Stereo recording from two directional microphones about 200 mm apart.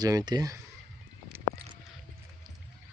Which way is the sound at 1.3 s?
10° right (ahead or behind).